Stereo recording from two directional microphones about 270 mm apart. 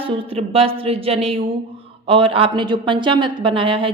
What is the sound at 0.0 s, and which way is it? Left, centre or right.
A woman's voice, centre.